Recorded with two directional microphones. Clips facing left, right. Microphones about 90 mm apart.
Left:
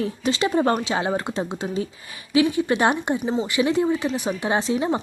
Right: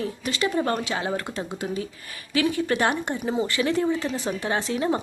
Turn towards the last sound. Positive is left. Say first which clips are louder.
# left 3 dB
turn(degrees=15)  # may be behind; listen again after turning